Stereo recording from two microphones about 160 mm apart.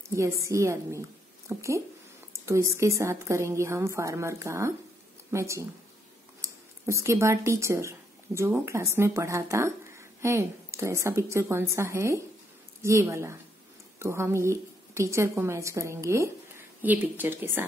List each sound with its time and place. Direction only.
0.1 s a woman's voice: 20° right (ahead or behind)